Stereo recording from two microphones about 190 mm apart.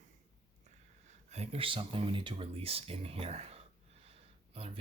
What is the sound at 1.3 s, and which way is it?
Speech, 30° right (ahead or behind).